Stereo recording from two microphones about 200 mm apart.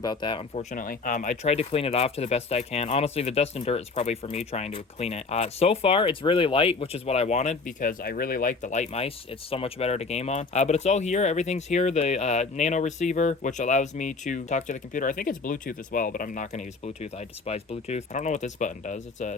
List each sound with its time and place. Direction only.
0.0 s speech: 20° left (ahead or behind); by 19.3 s 35° left (ahead or behind)